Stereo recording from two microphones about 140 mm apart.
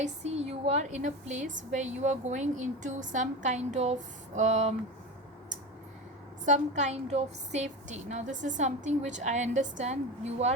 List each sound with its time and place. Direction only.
0.0 s a woman's voice: 50° right (ahead or behind)
6.4 s a woman's voice: 60° right (ahead or behind)